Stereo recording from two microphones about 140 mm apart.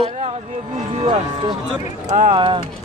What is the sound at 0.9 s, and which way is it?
Speech, 35° right (ahead or behind).